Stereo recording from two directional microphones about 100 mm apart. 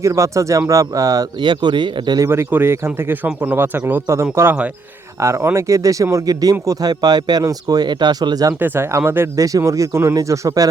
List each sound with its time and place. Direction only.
0.0 s speech: 30° right (ahead or behind); by 2.2 s 50° right (ahead or behind)
2.2 s speech: 25° right (ahead or behind); by 8.5 s 40° right (ahead or behind)
8.5 s speech: 20° right (ahead or behind)